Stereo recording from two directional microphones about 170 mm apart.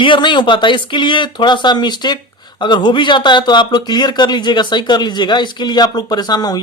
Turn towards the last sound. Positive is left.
turn(degrees=25)  # may be behind; listen again after turning